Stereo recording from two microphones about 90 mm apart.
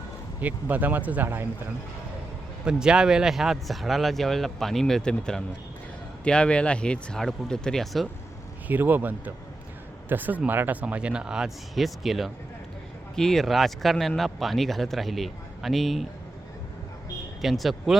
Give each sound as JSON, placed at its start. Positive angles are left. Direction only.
{"t": 0.3, "sound": "speech", "side_deg": -20}
{"t": 2.6, "sound": "speech", "side_deg": -10}
{"t": 8.6, "sound": "a man's voice", "side_deg": -20}
{"t": 17.4, "sound": "speech", "side_deg": 0}